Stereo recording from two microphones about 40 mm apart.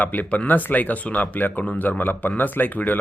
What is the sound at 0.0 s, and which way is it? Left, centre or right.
Speech, left.